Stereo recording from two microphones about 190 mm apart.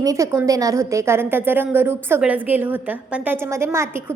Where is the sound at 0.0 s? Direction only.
15° right (ahead or behind).